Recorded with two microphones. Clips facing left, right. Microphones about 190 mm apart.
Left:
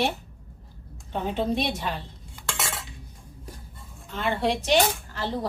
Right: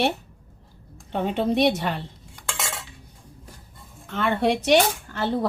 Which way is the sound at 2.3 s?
10° left (ahead or behind).